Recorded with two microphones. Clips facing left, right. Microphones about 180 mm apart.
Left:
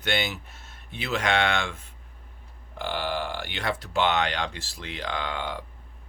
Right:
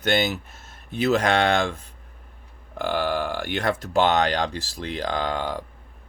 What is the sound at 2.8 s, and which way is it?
Speech, 50° right (ahead or behind).